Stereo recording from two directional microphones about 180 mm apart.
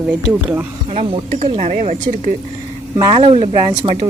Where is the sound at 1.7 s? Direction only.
45° right (ahead or behind).